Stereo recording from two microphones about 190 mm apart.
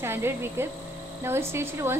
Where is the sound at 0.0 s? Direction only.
10° right (ahead or behind).